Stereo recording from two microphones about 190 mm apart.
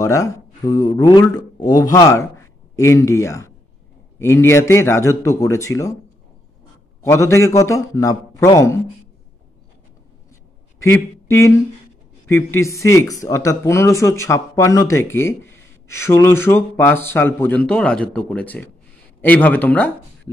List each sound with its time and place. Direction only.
0.0 s speech: 15° left (ahead or behind)
7.0 s speech: 15° left (ahead or behind)
10.8 s speech: 15° left (ahead or behind)